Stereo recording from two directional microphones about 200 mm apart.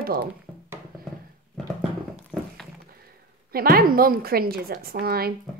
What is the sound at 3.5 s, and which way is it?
A woman's voice, 50° right (ahead or behind).